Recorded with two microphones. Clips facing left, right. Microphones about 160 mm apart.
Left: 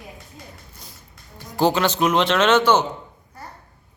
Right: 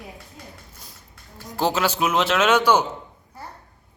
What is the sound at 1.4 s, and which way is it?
Speech, centre (ahead or behind).